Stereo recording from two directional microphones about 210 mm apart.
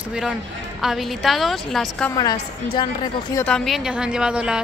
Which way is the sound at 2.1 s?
20° left (ahead or behind).